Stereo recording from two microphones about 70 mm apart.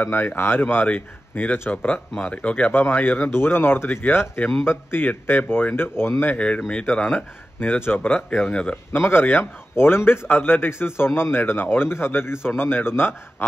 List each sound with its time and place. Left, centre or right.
0.0 s speech: left
6.3 s speech: centre
8.5 s speech: centre
8.9 s speech: left